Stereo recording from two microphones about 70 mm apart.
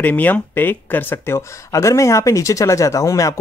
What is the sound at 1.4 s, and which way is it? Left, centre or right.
Speech, left.